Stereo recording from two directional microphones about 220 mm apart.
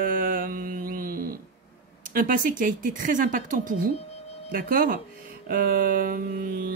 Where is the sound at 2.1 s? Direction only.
40° right (ahead or behind).